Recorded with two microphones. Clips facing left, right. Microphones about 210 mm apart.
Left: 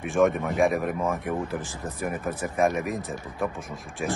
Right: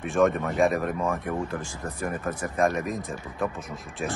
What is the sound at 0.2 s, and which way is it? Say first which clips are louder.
Speech: even; 5° left (ahead or behind).